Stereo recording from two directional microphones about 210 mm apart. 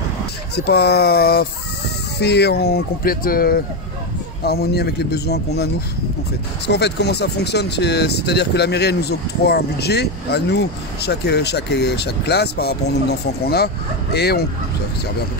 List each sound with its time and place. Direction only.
0.7 s speech: 50° left (ahead or behind)
6.7 s speech: 50° left (ahead or behind)